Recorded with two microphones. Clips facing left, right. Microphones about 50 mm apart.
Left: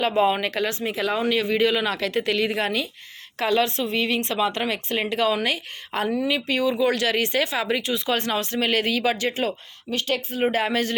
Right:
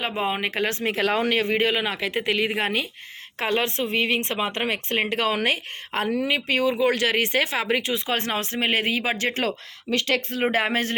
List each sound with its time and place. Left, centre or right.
0.0 s speech: centre
0.5 s speech: right
9.9 s speech: right
10.4 s speech: right